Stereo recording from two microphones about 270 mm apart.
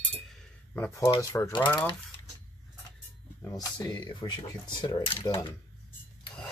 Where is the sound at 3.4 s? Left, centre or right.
Centre.